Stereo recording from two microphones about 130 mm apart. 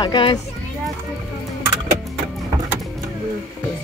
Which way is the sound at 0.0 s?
35° left (ahead or behind).